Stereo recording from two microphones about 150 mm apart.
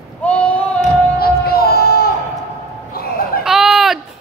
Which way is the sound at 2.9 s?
90° left.